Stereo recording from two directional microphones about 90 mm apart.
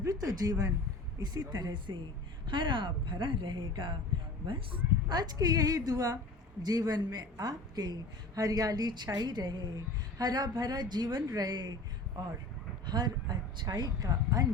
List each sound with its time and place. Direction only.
0.0 s a woman's voice: 45° right (ahead or behind); by 5.1 s 65° right (ahead or behind)
5.1 s a woman's voice: 50° right (ahead or behind)